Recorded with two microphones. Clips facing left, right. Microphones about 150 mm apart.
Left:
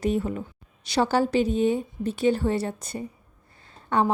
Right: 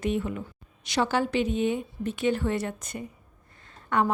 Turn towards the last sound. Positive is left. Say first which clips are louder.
# left 2 dB
turn(degrees=30)  # may be behind; listen again after turning